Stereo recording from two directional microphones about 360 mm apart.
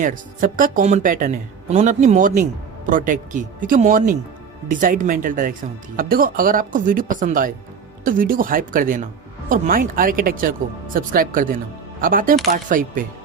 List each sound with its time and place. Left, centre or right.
0.0 s speech: right